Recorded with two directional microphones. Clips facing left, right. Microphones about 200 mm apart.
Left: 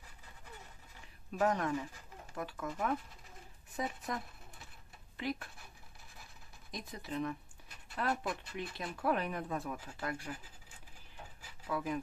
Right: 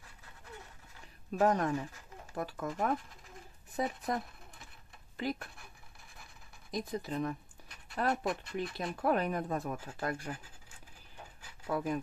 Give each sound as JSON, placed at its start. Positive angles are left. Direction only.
{"t": 1.4, "sound": "speech", "side_deg": -40}
{"t": 6.7, "sound": "speech", "side_deg": -40}
{"t": 11.6, "sound": "speech", "side_deg": -45}